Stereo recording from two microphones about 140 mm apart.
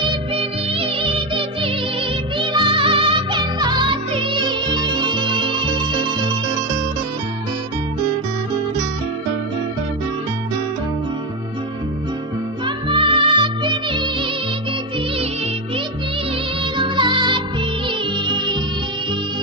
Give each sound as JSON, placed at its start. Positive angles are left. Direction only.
{"t": 0.4, "sound": "music", "side_deg": -40}
{"t": 12.6, "sound": "music", "side_deg": -35}
{"t": 16.7, "sound": "music", "side_deg": -35}